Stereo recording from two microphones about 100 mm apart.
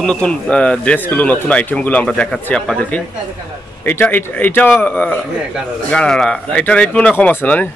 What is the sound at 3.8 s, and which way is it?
Speech, 20° left (ahead or behind).